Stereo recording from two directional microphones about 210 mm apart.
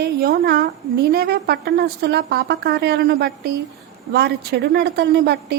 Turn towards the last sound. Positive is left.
turn(degrees=-50)  # may be behind; listen again after turning